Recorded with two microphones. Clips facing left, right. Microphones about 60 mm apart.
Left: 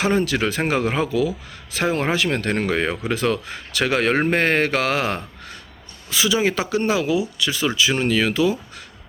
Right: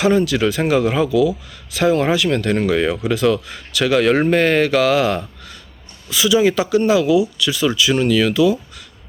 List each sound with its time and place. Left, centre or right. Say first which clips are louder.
0.0 s speech: right 4 dB; left